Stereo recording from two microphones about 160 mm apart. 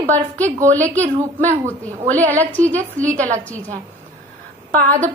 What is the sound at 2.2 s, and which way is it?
Speech, 10° left (ahead or behind).